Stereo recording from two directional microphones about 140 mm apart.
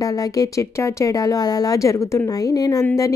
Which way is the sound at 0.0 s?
25° left (ahead or behind).